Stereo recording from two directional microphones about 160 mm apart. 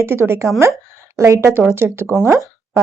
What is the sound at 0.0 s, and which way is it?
Speech, 15° right (ahead or behind).